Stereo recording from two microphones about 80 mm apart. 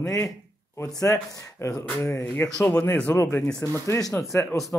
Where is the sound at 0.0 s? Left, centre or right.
Left.